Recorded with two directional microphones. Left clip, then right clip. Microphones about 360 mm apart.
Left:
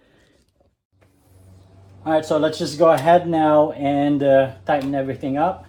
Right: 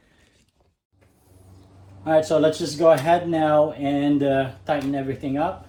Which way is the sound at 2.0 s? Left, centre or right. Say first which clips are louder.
Right 1 dB; centre.